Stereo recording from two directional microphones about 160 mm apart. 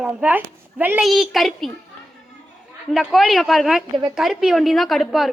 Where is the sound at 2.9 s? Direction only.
Centre (ahead or behind).